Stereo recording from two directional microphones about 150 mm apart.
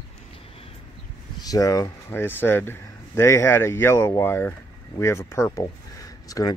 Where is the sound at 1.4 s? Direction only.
25° left (ahead or behind).